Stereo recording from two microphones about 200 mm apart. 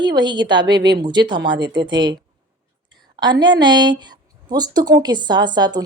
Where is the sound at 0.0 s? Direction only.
20° right (ahead or behind).